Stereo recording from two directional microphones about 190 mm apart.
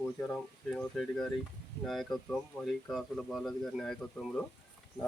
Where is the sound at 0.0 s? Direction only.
5° left (ahead or behind).